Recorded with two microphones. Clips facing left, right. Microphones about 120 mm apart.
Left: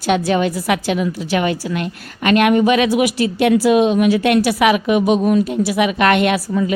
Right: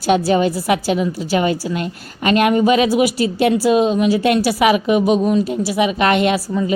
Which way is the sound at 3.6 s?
5° left (ahead or behind).